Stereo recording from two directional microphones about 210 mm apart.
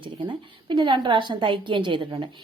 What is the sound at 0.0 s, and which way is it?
A woman's voice, 25° right (ahead or behind).